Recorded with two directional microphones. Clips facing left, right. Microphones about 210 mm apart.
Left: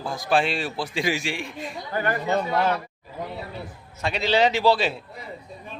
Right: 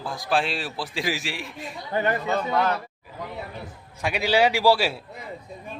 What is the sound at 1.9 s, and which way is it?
Speech, 25° right (ahead or behind).